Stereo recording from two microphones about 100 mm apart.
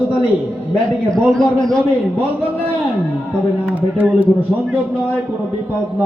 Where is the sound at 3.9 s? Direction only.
15° right (ahead or behind).